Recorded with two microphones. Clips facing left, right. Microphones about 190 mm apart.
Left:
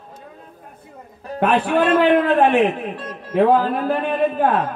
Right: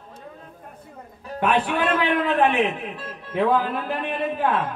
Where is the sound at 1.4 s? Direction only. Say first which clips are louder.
Left 5 dB; 45° left (ahead or behind).